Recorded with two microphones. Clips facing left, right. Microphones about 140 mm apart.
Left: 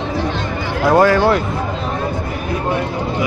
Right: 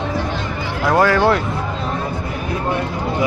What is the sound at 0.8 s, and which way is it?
Speech, 15° left (ahead or behind).